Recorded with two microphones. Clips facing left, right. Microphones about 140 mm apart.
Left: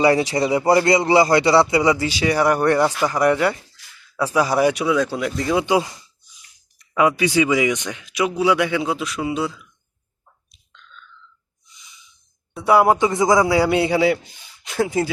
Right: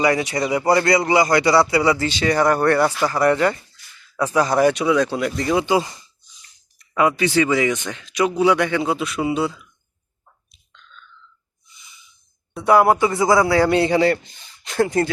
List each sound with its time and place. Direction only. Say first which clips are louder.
0.0 s a man's voice: left 3 dB; 30° left (ahead or behind); by 9.6 s centre (ahead or behind)
10.5 s chewing: left 1 dB; centre (ahead or behind)
11.7 s a sound: even; centre (ahead or behind)
12.5 s a man's voice: even; 10° left (ahead or behind)